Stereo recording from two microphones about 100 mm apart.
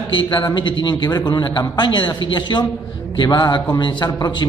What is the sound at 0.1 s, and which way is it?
A man's voice, 50° left (ahead or behind).